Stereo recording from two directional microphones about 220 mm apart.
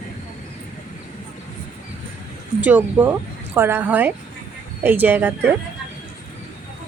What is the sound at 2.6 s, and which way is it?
Speech, 5° right (ahead or behind).